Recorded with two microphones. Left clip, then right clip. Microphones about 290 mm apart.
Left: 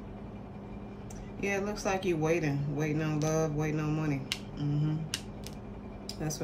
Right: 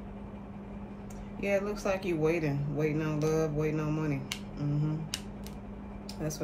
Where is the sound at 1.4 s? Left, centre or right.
Centre.